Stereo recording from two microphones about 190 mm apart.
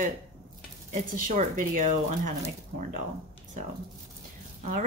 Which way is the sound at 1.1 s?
45° right (ahead or behind).